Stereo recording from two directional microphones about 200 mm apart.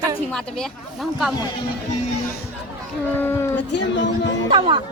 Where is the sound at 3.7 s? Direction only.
65° left (ahead or behind).